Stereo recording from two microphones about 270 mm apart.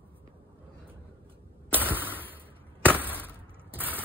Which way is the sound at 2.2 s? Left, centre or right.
Centre.